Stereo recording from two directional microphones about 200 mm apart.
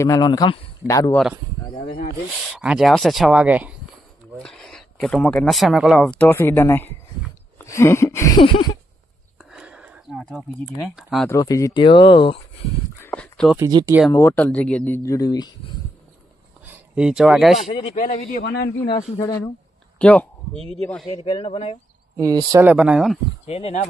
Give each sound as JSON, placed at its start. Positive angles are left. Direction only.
{"t": 0.0, "sound": "speech", "side_deg": 20}
{"t": 2.5, "sound": "speech", "side_deg": 0}
{"t": 9.4, "sound": "a sound", "side_deg": -5}
{"t": 11.2, "sound": "speech", "side_deg": 15}
{"t": 13.0, "sound": "a sound", "side_deg": 5}
{"t": 13.6, "sound": "speech", "side_deg": -15}
{"t": 14.1, "sound": "speech", "side_deg": 10}
{"t": 16.6, "sound": "speech", "side_deg": -5}
{"t": 17.6, "sound": "speech", "side_deg": 30}
{"t": 18.5, "sound": "speech", "side_deg": 55}
{"t": 20.0, "sound": "speech", "side_deg": 5}
{"t": 21.1, "sound": "speech", "side_deg": 30}
{"t": 22.1, "sound": "speech", "side_deg": -20}
{"t": 23.4, "sound": "speech", "side_deg": 30}